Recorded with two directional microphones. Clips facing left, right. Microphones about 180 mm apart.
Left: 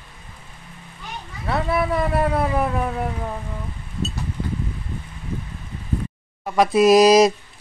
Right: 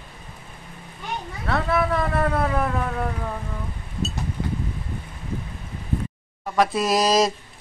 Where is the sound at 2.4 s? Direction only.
15° left (ahead or behind).